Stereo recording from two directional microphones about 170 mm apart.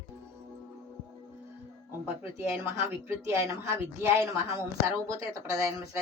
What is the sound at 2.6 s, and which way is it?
A woman's voice, 15° right (ahead or behind).